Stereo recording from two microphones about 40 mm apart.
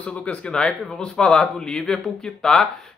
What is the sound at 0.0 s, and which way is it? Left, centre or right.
Speech, left.